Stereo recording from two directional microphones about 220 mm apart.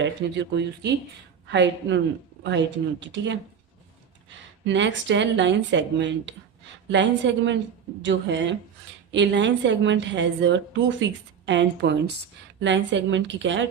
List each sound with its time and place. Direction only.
0.0 s a woman's voice: 55° right (ahead or behind)
4.6 s a woman's voice: 55° right (ahead or behind)